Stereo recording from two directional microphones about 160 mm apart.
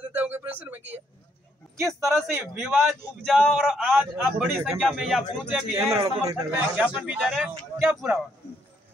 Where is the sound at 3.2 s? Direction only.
5° left (ahead or behind).